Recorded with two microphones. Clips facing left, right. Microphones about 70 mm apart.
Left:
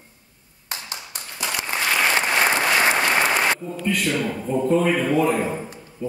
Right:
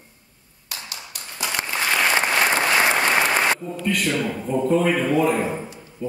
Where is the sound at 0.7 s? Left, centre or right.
Left.